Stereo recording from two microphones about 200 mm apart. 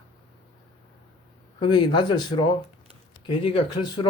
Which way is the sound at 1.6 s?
20° left (ahead or behind).